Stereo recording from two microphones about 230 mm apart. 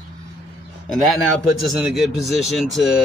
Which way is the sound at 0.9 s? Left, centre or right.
Centre.